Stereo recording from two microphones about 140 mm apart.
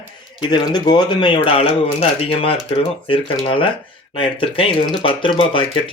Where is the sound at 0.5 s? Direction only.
30° left (ahead or behind).